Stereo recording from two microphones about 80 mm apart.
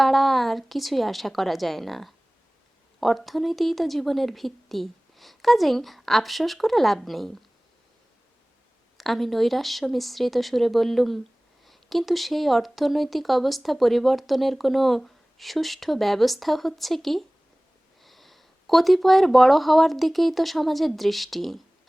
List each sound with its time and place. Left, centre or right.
0.0 s speech: centre
9.0 s speech: centre